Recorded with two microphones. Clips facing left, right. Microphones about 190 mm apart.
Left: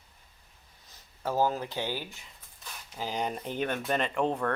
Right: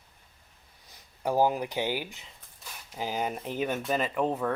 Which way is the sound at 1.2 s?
15° right (ahead or behind).